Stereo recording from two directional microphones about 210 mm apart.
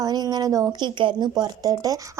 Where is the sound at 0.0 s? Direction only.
20° right (ahead or behind).